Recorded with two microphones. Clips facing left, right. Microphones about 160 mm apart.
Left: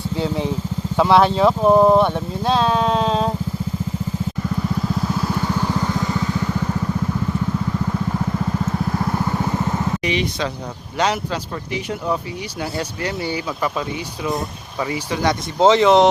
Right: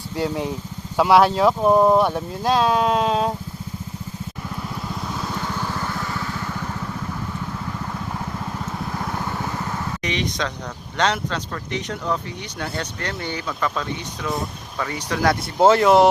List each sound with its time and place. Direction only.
0.9 s speech: 10° right (ahead or behind)
5.7 s vehicle: 15° left (ahead or behind)
10.0 s speech: 10° left (ahead or behind)
15.1 s speech: centre (ahead or behind)